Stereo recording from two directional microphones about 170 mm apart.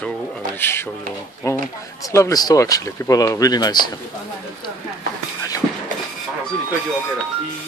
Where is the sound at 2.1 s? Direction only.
20° left (ahead or behind).